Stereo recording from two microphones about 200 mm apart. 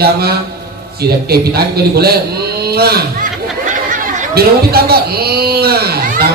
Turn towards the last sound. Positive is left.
turn(degrees=-50)  # may be behind; listen again after turning